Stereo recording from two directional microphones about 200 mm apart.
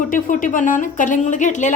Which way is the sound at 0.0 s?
40° left (ahead or behind).